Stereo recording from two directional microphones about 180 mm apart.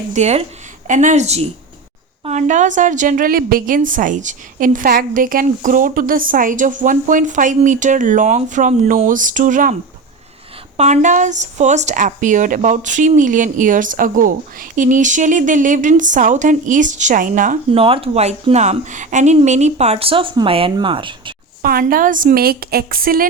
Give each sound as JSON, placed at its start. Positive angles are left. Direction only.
{"t": 0.1, "sound": "a woman's voice", "side_deg": -40}
{"t": 10.8, "sound": "a woman's voice", "side_deg": -40}
{"t": 17.7, "sound": "speech", "side_deg": -30}
{"t": 21.6, "sound": "a woman's voice", "side_deg": -55}